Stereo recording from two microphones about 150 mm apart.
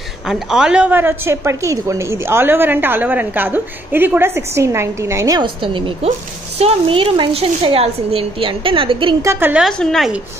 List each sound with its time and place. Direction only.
0.3 s a woman's voice: 5° right (ahead or behind); by 5.4 s 20° right (ahead or behind)
5.4 s a woman's voice: 35° right (ahead or behind)
9.2 s a woman's voice: 15° right (ahead or behind)
9.7 s a woman's voice: 5° left (ahead or behind)